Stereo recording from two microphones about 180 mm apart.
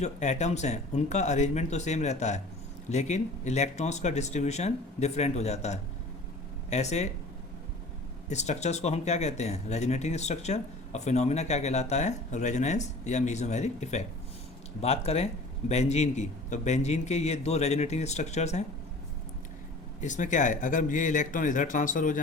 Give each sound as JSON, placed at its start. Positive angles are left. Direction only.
{"t": 0.0, "sound": "speech", "side_deg": 40}
{"t": 8.3, "sound": "speech", "side_deg": 40}
{"t": 20.0, "sound": "speech", "side_deg": 45}